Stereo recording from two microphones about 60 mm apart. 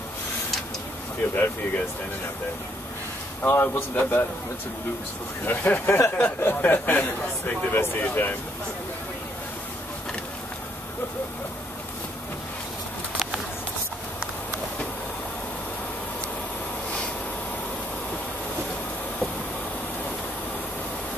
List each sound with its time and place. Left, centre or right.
1.3 s speech: left
3.4 s speech: left
5.4 s speech: left
5.9 s speech: left
6.2 s speech: left